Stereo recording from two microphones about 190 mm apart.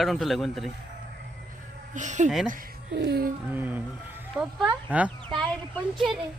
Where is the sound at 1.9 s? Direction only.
40° right (ahead or behind).